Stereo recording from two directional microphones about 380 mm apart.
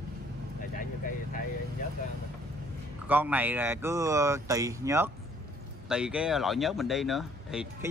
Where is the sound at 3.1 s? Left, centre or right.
Centre.